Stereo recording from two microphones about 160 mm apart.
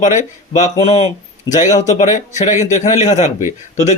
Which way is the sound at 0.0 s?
50° left (ahead or behind).